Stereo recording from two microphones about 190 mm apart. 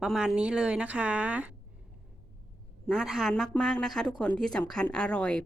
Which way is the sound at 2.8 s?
5° right (ahead or behind).